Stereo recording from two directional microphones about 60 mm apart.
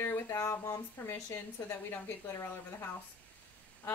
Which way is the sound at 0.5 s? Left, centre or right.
Left.